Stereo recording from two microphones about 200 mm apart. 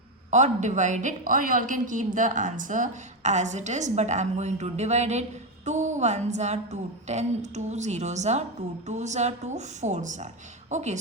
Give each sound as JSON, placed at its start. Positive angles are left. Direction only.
{"t": 0.3, "sound": "a woman's voice", "side_deg": -35}